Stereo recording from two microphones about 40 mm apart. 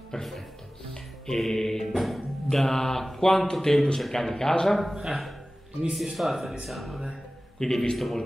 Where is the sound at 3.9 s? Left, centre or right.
Centre.